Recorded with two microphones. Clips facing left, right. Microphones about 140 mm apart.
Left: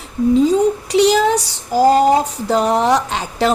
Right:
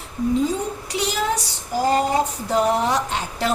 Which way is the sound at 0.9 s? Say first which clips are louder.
Left 9 dB; 90° left.